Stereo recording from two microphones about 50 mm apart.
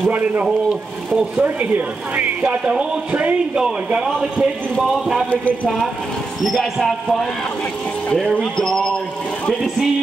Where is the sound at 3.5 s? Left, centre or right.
Centre.